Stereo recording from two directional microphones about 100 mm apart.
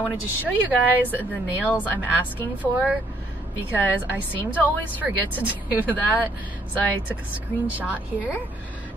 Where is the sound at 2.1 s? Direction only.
15° right (ahead or behind).